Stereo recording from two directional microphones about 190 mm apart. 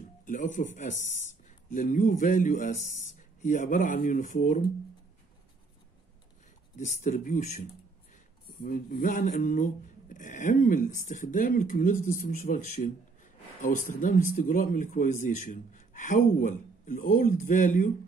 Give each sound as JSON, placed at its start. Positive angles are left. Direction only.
{"t": 0.2, "sound": "speech", "side_deg": 40}
{"t": 6.8, "sound": "speech", "side_deg": 45}
{"t": 8.6, "sound": "speech", "side_deg": 45}